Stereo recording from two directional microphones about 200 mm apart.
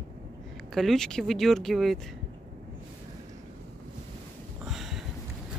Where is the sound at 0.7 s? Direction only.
Centre (ahead or behind).